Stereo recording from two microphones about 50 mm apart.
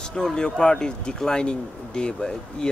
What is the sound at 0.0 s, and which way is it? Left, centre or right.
Speech, centre.